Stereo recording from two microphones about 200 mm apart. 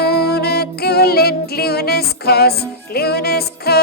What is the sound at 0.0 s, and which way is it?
Music, 50° left (ahead or behind).